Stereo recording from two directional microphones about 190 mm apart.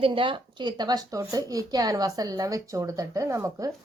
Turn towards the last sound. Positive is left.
turn(degrees=-15)  # may be behind; listen again after turning